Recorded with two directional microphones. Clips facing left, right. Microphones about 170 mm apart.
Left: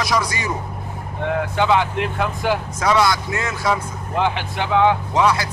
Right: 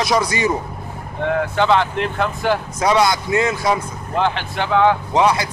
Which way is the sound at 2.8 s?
20° right (ahead or behind).